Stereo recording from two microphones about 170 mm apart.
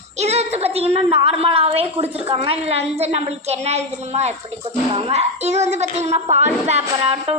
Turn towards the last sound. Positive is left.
turn(degrees=-35)  # may be behind; listen again after turning